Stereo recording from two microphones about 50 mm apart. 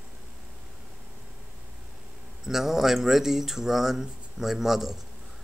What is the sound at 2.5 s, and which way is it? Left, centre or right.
Speech, centre.